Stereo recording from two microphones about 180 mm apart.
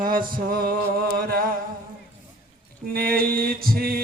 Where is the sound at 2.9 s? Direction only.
55° right (ahead or behind).